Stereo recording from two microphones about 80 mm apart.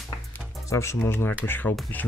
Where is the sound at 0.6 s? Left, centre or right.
Left.